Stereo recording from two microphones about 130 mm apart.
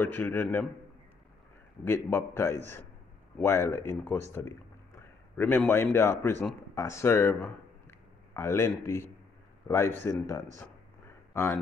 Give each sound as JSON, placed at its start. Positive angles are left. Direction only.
{"t": 0.0, "sound": "speech", "side_deg": 15}
{"t": 2.0, "sound": "speech", "side_deg": 20}